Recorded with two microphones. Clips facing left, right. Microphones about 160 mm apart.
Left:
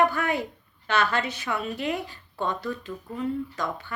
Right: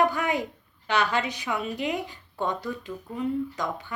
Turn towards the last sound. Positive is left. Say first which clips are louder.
# right 1 dB
turn(degrees=-15)  # may be behind; listen again after turning